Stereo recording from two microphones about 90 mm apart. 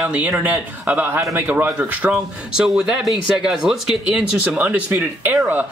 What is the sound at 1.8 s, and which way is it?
A man's voice, 10° right (ahead or behind).